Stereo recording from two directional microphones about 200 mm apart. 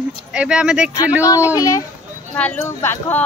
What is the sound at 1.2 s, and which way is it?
Speech, 15° left (ahead or behind).